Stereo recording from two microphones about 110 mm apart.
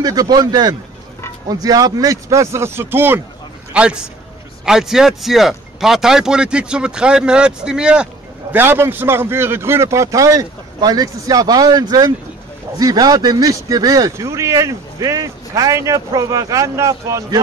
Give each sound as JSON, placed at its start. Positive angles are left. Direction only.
{"t": 0.0, "sound": "a man's voice", "side_deg": -35}